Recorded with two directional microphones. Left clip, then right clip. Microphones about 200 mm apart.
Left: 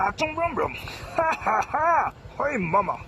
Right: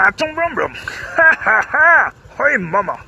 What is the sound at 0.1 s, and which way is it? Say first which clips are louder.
Speech: right 7 dB; 5° right (ahead or behind).